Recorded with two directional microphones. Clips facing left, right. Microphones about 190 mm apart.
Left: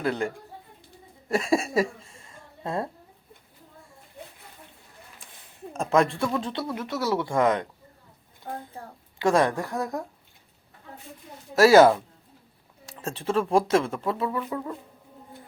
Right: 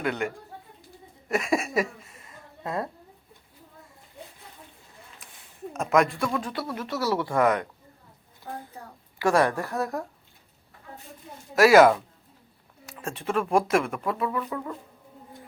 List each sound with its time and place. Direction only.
0.0 s speech: 30° left (ahead or behind)
1.3 s a sound: 30° left (ahead or behind)
5.2 s a sound: 30° left (ahead or behind)
5.7 s speech: 30° left (ahead or behind)
8.4 s a child's voice: 45° left (ahead or behind)
9.1 s a woman's voice: 20° left (ahead or behind)
11.5 s speech: 30° left (ahead or behind)